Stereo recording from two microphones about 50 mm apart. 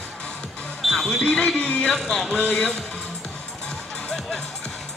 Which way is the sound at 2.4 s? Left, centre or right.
Centre.